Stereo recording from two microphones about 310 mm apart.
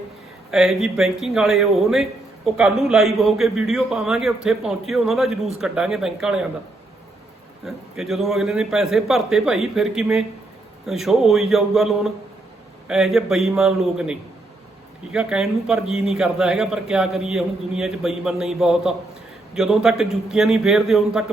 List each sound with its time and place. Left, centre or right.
0.5 s a man's voice: centre
7.6 s a man's voice: centre